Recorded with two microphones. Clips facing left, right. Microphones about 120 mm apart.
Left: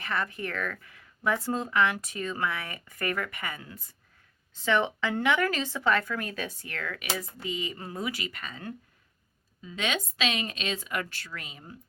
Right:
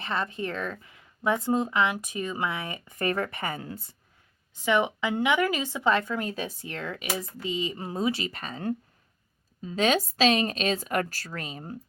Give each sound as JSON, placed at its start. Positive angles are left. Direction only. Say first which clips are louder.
{"t": 0.0, "sound": "speech", "louder": "right 2 dB", "side_deg": -20}
{"t": 4.5, "sound": "a woman's voice", "louder": "right 2 dB", "side_deg": -15}